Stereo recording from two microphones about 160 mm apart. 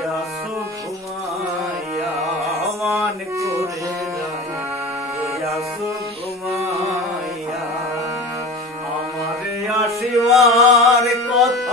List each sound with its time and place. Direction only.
2.6 s music: centre (ahead or behind)
3.0 s music: 20° right (ahead or behind)
9.8 s a sound: centre (ahead or behind)